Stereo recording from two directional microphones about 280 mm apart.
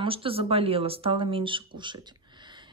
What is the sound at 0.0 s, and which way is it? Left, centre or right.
Speech, centre.